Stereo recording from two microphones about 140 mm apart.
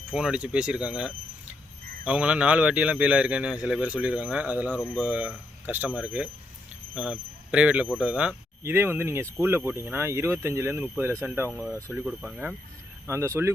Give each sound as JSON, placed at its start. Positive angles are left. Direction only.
{"t": 0.1, "sound": "speech", "side_deg": -5}
{"t": 13.1, "sound": "speech", "side_deg": -20}